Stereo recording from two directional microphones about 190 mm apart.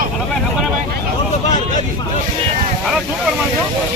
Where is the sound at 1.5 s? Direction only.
40° left (ahead or behind).